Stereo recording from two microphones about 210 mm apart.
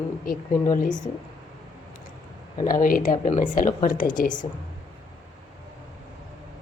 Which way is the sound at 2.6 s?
40° left (ahead or behind).